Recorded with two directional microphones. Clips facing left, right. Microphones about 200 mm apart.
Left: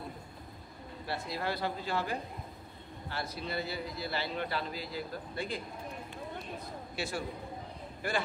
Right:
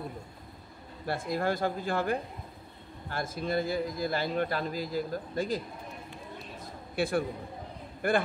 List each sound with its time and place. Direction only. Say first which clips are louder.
1.0 s a man's voice: right 6 dB; 50° right (ahead or behind)
7.0 s a man's voice: right 8 dB; 55° right (ahead or behind)